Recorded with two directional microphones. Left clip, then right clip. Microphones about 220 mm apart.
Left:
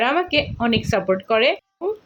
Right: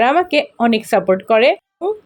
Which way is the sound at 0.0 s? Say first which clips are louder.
Right 5 dB; 20° right (ahead or behind).